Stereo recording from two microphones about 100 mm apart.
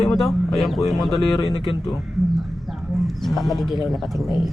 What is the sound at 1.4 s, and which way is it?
Speech, 60° left (ahead or behind).